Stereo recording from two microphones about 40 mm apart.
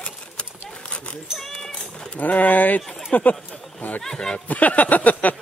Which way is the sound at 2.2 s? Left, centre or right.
Left.